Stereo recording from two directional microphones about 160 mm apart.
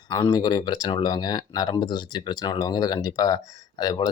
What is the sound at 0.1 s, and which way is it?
Speech, 20° left (ahead or behind).